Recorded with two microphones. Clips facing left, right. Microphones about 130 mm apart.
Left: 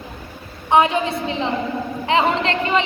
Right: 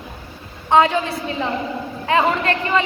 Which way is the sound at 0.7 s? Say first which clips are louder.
Even; 20° left (ahead or behind).